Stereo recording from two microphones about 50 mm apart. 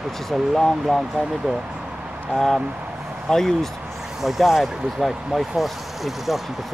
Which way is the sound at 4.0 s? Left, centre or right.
Centre.